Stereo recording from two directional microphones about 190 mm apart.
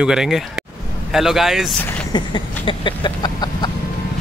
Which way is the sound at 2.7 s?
25° left (ahead or behind).